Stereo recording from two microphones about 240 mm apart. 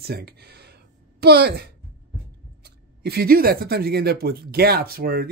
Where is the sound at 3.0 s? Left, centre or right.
Right.